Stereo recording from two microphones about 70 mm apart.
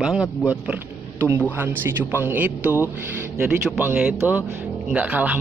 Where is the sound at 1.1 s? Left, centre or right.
Right.